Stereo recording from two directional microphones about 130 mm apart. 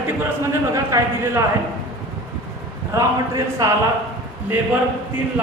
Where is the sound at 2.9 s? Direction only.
25° right (ahead or behind).